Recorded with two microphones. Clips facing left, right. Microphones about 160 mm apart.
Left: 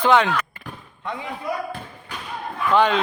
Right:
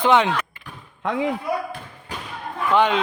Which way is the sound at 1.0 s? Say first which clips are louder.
Right 8 dB; 90° right.